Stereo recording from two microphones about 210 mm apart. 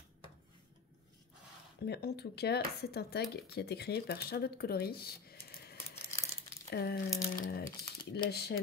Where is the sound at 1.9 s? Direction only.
50° left (ahead or behind).